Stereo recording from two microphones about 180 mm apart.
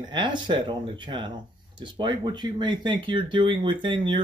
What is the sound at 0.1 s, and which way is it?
Speech, 25° right (ahead or behind).